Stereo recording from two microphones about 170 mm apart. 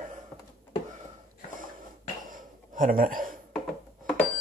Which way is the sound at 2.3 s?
55° right (ahead or behind).